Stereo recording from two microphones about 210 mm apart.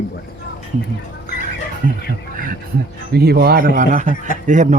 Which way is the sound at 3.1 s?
50° right (ahead or behind).